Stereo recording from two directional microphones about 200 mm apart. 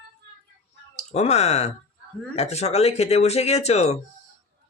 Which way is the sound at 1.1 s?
30° left (ahead or behind).